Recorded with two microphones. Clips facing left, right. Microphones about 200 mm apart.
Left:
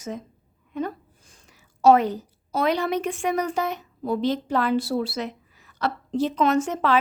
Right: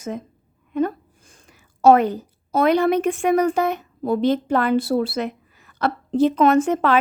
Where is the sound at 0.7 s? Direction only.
55° right (ahead or behind).